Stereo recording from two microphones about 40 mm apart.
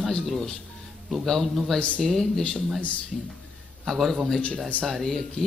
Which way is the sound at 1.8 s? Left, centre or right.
Left.